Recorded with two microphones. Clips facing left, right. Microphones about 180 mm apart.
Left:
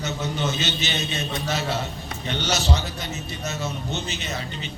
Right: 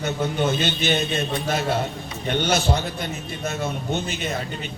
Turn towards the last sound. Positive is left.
turn(degrees=-50)  # may be behind; listen again after turning